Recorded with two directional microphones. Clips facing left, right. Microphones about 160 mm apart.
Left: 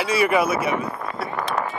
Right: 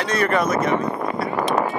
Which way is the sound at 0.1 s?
10° left (ahead or behind).